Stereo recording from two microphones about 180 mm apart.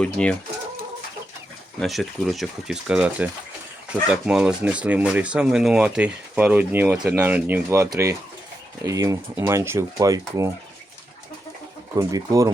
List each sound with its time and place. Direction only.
0.0 s speech: 5° left (ahead or behind)
1.8 s speech: centre (ahead or behind); by 10.5 s 20° right (ahead or behind)
11.9 s speech: 20° right (ahead or behind)